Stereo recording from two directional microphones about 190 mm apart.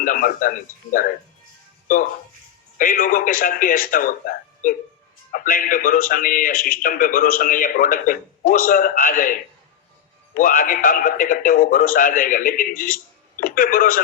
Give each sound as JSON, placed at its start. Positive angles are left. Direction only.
{"t": 0.0, "sound": "a man's voice", "side_deg": 45}
{"t": 2.7, "sound": "a man's voice", "side_deg": 45}